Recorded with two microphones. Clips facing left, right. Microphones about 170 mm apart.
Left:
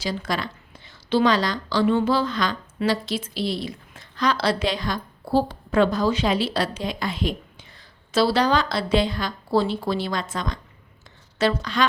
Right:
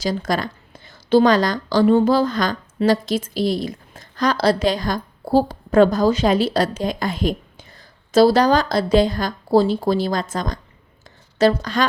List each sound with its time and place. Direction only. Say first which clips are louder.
0.0 s a woman's voice: right 5 dB; 45° right (ahead or behind)